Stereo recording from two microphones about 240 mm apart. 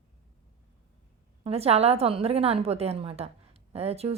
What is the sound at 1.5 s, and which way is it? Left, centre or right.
A woman's voice, right.